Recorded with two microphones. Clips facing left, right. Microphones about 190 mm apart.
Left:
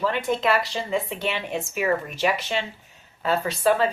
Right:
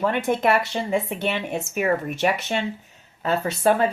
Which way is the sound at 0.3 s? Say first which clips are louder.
Right 2 dB; 55° right (ahead or behind).